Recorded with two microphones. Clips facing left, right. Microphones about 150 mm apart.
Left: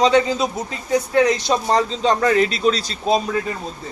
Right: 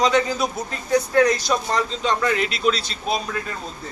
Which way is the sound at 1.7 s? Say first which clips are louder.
Left 5 dB; 35° left (ahead or behind).